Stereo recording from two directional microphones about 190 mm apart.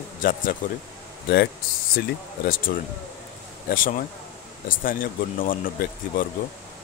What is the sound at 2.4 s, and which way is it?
Speech, 50° left (ahead or behind).